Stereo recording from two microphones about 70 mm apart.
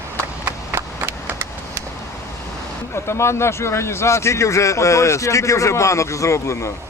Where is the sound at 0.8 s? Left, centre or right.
Right.